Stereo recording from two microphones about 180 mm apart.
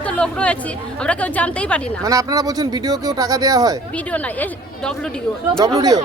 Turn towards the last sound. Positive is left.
turn(degrees=-20)  # may be behind; listen again after turning